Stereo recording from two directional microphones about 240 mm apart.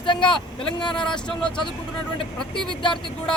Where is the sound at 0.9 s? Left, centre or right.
Centre.